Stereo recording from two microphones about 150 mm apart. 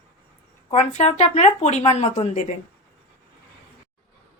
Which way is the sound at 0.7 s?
45° left (ahead or behind).